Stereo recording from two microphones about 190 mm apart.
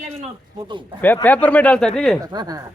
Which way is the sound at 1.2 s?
5° left (ahead or behind).